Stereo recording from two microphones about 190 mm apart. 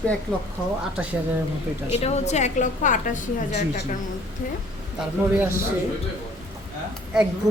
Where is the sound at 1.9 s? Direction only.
35° left (ahead or behind).